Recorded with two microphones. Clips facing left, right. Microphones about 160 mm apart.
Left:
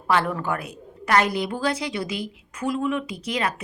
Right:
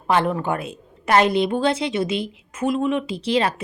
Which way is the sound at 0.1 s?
20° right (ahead or behind).